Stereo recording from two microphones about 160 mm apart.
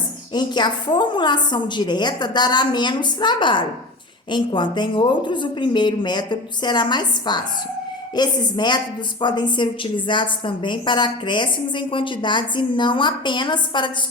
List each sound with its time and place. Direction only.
0.3 s a woman's voice: 25° left (ahead or behind)